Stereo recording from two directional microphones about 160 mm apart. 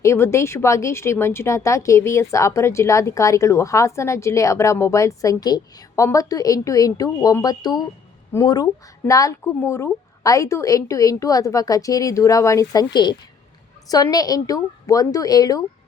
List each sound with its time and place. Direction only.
0.0 s speech: 15° left (ahead or behind)